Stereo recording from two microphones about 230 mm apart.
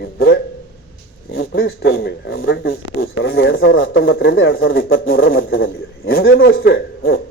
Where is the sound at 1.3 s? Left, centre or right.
Left.